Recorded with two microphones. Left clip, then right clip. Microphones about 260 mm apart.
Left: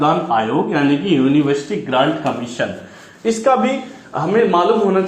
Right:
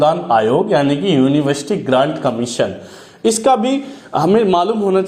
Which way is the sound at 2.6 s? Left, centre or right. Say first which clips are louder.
Right 3 dB; right.